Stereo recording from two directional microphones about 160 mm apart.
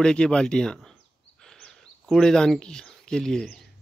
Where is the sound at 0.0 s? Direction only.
5° left (ahead or behind).